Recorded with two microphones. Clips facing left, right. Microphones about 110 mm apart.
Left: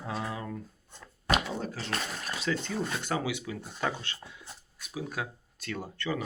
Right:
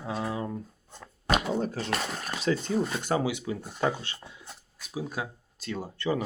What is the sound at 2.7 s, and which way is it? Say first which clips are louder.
Speech: right 5 dB; 30° right (ahead or behind).